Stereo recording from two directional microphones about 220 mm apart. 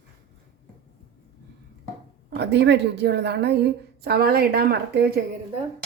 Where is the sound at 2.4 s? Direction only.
50° right (ahead or behind).